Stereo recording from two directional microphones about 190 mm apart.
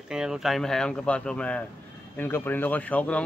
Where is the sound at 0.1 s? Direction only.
5° right (ahead or behind).